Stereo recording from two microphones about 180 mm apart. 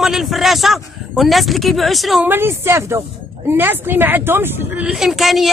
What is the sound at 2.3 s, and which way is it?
A man's voice, 15° right (ahead or behind).